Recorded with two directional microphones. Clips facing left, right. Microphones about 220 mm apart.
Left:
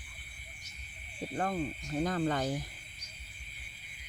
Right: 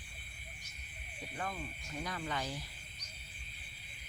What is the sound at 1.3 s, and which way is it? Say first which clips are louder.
Speech: left 9 dB; 45° left (ahead or behind).